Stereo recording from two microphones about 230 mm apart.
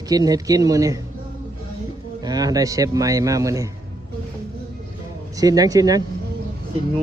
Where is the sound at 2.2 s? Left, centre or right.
Centre.